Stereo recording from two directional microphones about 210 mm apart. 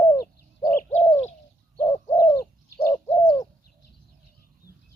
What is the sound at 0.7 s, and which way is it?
Bird, 40° left (ahead or behind).